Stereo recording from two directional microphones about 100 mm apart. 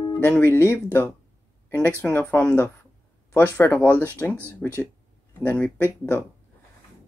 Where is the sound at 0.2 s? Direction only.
25° left (ahead or behind).